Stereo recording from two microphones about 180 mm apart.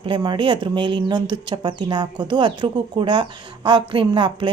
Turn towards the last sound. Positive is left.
turn(degrees=-30)  # may be behind; listen again after turning